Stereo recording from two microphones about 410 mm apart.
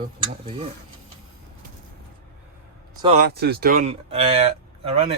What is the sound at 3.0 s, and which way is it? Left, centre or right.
Speech, centre.